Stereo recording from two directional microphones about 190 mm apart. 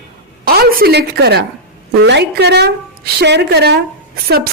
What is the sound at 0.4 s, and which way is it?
A woman's voice, 50° right (ahead or behind).